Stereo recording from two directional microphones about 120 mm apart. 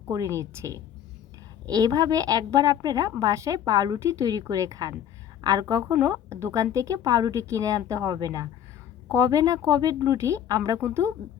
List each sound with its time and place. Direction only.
0.1 s a woman's voice: 25° right (ahead or behind)